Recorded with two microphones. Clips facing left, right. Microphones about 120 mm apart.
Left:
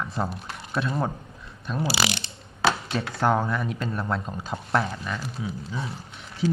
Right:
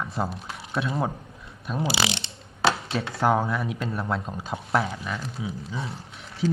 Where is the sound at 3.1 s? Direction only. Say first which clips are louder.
Right 1 dB; centre (ahead or behind).